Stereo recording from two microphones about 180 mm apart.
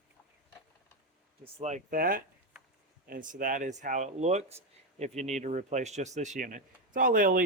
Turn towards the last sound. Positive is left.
turn(degrees=-50)  # may be behind; listen again after turning